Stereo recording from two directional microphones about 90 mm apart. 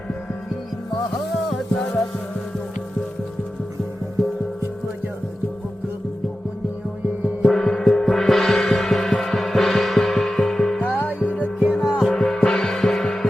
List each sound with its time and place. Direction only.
7.4 s gong: 5° left (ahead or behind)
11.2 s music: 15° left (ahead or behind)
11.6 s music: 10° right (ahead or behind); by 13.2 s 5° left (ahead or behind)